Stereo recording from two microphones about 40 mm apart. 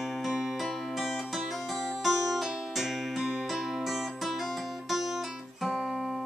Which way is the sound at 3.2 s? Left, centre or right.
Centre.